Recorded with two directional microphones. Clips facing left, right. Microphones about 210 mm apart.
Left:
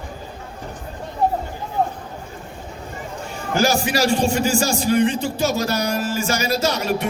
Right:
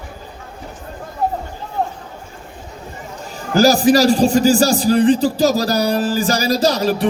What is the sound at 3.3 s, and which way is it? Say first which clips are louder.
A man's voice: right 6 dB; 35° right (ahead or behind).